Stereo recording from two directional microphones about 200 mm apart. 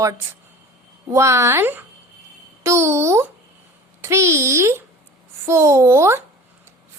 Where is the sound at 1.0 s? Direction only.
15° right (ahead or behind).